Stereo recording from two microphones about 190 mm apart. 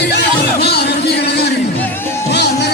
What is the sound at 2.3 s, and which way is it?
Music, 60° left (ahead or behind).